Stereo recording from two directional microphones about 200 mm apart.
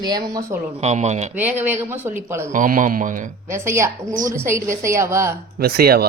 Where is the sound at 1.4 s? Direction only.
10° right (ahead or behind).